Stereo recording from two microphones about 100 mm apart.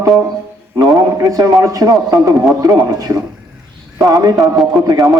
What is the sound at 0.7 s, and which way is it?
A man's voice, 40° right (ahead or behind).